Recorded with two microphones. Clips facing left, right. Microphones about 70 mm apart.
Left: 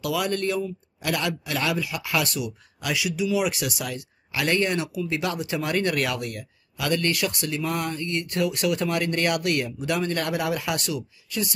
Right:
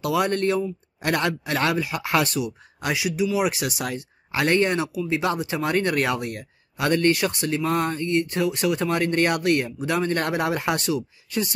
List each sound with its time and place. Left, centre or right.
0.0 s speech: right